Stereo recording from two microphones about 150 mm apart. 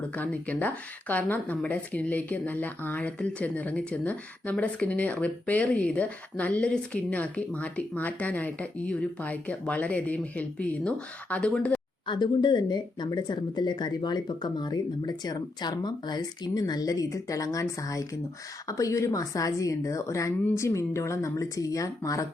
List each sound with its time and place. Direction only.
0.2 s speech: 10° left (ahead or behind)
12.0 s speech: 30° left (ahead or behind)